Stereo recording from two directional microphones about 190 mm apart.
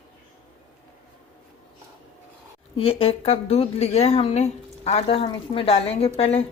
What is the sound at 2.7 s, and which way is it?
A woman's voice, 30° left (ahead or behind).